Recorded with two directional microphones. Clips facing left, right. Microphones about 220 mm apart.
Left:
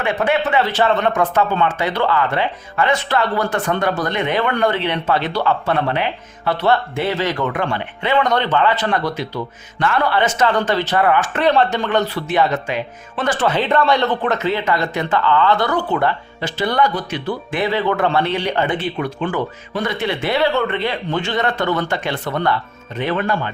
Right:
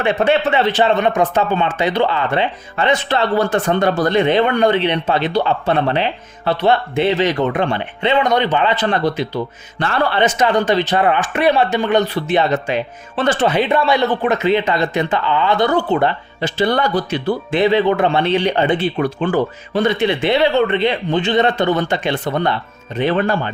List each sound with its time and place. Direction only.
0.0 s speech: 25° right (ahead or behind)
8.2 s speech: 15° right (ahead or behind)
11.3 s speech: 10° right (ahead or behind); by 13.5 s 25° right (ahead or behind)
13.5 s speech: 10° right (ahead or behind); by 23.3 s 30° right (ahead or behind)